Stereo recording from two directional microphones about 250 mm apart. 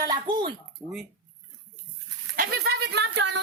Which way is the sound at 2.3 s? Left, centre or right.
Right.